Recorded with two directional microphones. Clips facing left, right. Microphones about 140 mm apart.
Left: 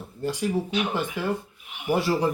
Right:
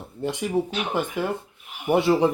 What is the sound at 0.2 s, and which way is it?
Speech, 20° right (ahead or behind).